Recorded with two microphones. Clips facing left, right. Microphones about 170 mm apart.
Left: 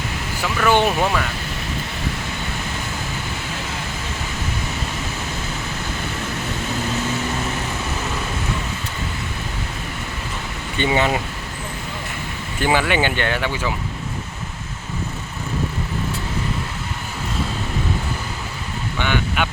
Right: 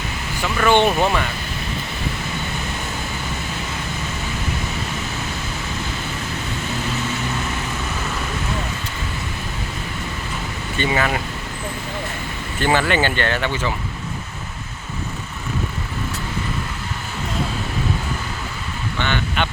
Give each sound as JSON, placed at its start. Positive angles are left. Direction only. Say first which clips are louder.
{"t": 0.4, "sound": "speech", "louder": "right 1 dB", "side_deg": 5}
{"t": 10.8, "sound": "speech", "louder": "left 2 dB", "side_deg": 20}
{"t": 12.5, "sound": "speech", "louder": "even", "side_deg": 10}
{"t": 18.9, "sound": "vehicle", "louder": "left 1 dB", "side_deg": 10}